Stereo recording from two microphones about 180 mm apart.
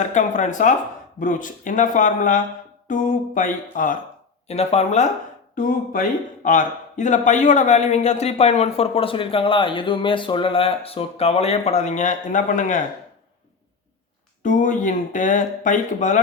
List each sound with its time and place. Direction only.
0.0 s speech: 45° left (ahead or behind)
4.4 s speech: 35° left (ahead or behind)
5.5 s speech: 50° left (ahead or behind)
14.4 s speech: 45° left (ahead or behind)